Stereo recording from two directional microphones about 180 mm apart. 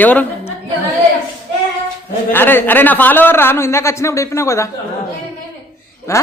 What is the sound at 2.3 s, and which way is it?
Speech, 10° left (ahead or behind).